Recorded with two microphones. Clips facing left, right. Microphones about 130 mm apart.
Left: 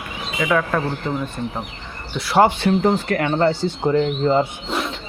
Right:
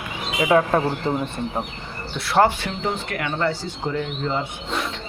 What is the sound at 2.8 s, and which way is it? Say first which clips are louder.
Speech: left 7 dB; 40° left (ahead or behind).